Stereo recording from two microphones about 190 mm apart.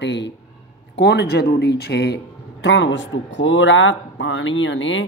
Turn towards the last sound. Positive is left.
turn(degrees=80)